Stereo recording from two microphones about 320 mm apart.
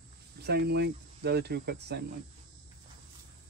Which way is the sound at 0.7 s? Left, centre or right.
Right.